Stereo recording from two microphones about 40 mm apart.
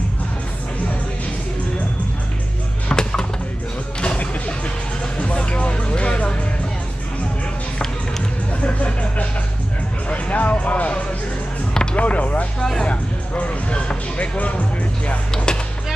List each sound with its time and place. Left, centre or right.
2.9 s music: left
8.6 s a sound: left
10.1 s music: left
12.5 s music: centre
12.8 s music: left